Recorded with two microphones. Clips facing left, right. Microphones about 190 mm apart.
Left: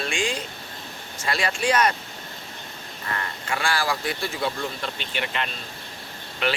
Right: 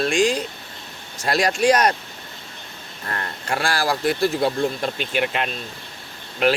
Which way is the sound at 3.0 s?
45° right (ahead or behind).